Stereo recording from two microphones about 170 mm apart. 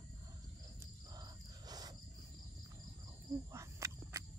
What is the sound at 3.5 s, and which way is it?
Cricket, 15° right (ahead or behind).